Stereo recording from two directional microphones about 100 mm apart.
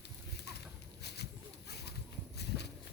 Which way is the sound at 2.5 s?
20° right (ahead or behind).